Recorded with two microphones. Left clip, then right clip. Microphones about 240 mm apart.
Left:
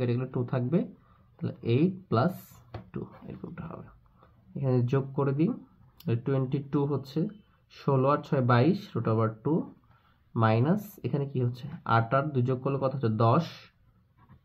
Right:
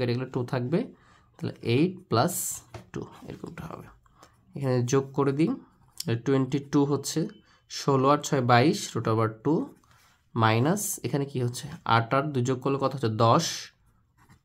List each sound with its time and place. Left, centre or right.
0.0 s speech: right
3.5 s speech: right